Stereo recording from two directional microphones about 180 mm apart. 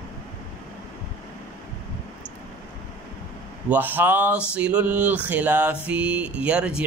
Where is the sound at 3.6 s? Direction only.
10° right (ahead or behind).